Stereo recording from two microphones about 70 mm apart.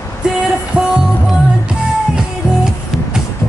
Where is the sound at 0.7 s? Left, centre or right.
Centre.